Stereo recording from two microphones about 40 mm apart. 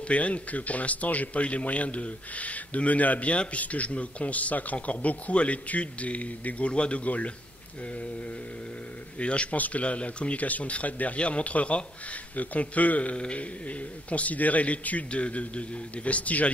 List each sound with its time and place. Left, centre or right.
0.1 s speech: left
9.2 s a man's voice: left
13.1 s speech: left